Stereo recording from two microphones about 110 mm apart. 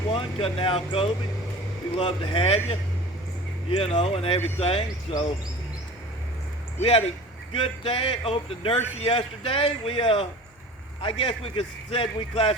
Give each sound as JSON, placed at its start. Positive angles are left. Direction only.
{"t": 0.1, "sound": "a man's voice", "side_deg": 55}
{"t": 6.7, "sound": "a man's voice", "side_deg": 60}